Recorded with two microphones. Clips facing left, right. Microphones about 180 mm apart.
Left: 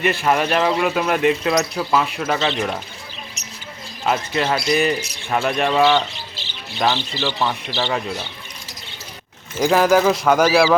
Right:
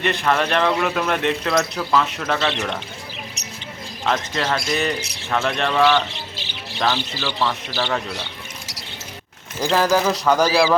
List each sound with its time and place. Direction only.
0.0 s speech: 5° left (ahead or behind)
4.0 s speech: 5° left (ahead or behind)
9.6 s speech: 15° left (ahead or behind)